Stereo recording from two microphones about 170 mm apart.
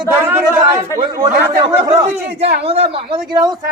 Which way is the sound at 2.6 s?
35° right (ahead or behind).